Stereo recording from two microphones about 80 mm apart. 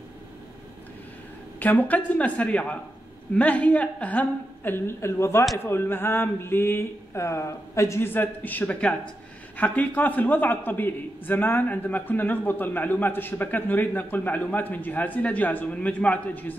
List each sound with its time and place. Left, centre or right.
1.6 s a man's voice: left
8.1 s a man's voice: left